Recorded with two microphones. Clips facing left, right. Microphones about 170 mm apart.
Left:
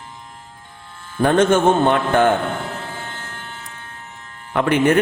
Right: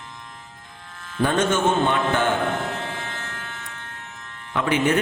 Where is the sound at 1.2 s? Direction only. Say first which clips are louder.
Left 6 dB; 55° left (ahead or behind).